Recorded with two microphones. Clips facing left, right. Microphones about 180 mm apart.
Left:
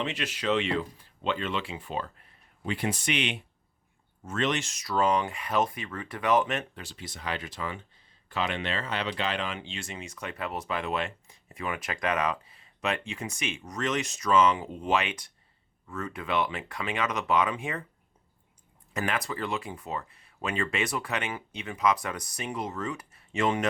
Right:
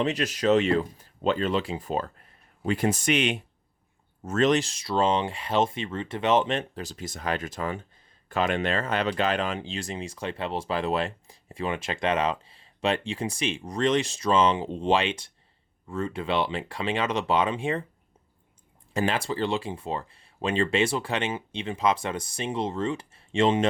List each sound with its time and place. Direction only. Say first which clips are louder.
0.0 s speech: right 6 dB; 40° right (ahead or behind)
18.9 s speech: right 5 dB; 30° right (ahead or behind)